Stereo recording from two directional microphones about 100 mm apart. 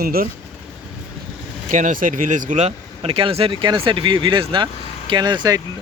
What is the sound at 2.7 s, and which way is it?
Speech, 75° right (ahead or behind).